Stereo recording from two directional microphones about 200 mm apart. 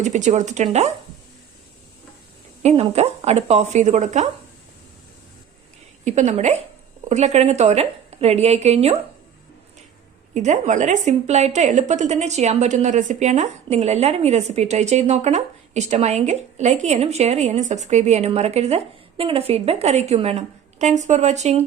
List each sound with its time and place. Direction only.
0.0 s a woman's voice: 35° right (ahead or behind)
2.6 s a woman's voice: 30° right (ahead or behind)
6.1 s a woman's voice: 35° right (ahead or behind)
10.3 s a woman's voice: 35° right (ahead or behind)